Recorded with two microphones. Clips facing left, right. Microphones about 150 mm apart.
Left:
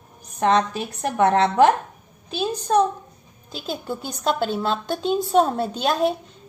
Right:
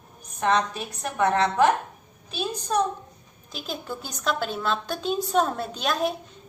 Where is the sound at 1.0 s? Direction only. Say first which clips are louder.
Left 4 dB; 30° left (ahead or behind).